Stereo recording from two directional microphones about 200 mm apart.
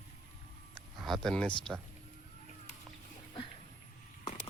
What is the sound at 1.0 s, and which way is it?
Speech, centre (ahead or behind).